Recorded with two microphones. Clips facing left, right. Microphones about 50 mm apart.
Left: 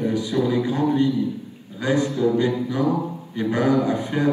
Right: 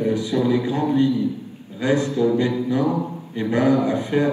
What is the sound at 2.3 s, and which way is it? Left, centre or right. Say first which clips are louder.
Speech: right 1 dB; right.